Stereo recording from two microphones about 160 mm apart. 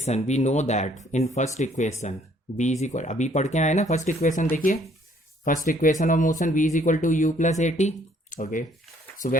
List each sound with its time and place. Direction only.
0.0 s speech: 45° left (ahead or behind)